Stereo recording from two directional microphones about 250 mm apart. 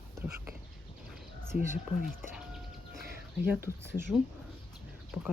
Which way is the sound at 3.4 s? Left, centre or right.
Centre.